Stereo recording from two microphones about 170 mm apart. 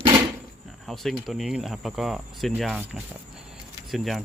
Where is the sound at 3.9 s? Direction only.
Centre (ahead or behind).